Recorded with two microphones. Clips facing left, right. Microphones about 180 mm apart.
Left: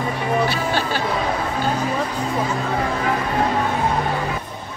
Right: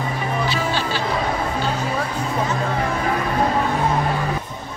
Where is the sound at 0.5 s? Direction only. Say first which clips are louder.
Left 1 dB; 50° left (ahead or behind).